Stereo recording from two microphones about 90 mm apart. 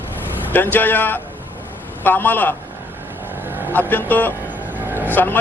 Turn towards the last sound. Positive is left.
turn(degrees=20)  # may be behind; listen again after turning